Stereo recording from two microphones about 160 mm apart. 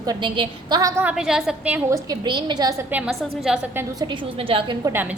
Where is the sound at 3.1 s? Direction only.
Centre (ahead or behind).